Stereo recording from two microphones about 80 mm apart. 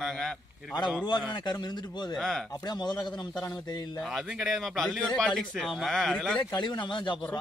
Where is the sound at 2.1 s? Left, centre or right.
Centre.